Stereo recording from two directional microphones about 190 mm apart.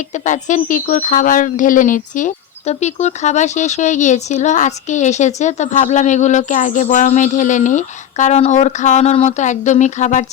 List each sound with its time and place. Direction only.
0.1 s speech: 40° left (ahead or behind)